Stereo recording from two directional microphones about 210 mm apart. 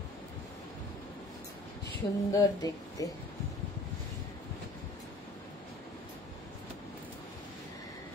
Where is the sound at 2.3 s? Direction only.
15° left (ahead or behind).